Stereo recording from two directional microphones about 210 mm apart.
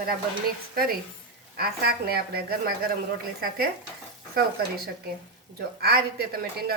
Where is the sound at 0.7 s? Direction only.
45° right (ahead or behind).